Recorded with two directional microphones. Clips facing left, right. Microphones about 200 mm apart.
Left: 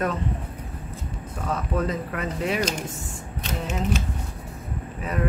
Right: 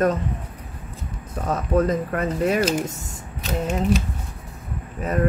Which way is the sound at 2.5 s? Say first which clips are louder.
Right 5 dB; 5° right (ahead or behind).